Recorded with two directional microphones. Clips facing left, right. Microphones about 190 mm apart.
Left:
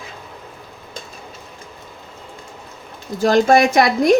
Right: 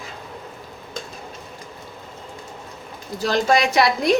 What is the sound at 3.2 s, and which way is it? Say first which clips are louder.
Speech: left 6 dB; 50° left (ahead or behind).